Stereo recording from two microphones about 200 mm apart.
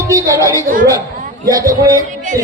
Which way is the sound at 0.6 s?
45° right (ahead or behind).